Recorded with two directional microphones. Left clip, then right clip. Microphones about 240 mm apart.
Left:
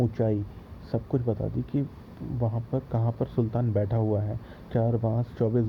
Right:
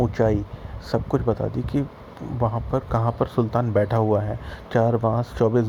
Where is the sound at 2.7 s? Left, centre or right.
Centre.